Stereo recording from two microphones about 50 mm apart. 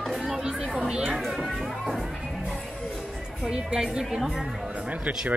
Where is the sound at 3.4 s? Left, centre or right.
Centre.